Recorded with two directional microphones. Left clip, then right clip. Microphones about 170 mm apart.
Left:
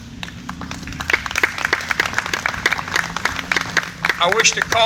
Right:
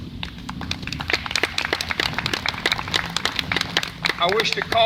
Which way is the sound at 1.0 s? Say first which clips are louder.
Left 6 dB; 60° left (ahead or behind).